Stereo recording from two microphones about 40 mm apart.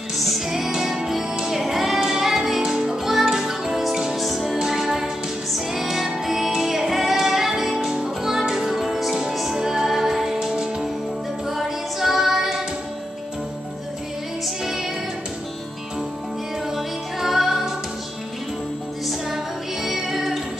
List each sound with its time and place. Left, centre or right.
0.7 s music: centre
11.4 s music: centre
14.6 s music: centre
16.7 s music: centre
19.0 s music: centre